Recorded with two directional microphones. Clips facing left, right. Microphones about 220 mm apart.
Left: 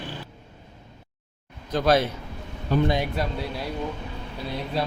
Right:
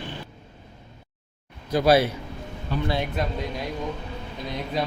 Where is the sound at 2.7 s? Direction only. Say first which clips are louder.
Left 6 dB; 45° left (ahead or behind).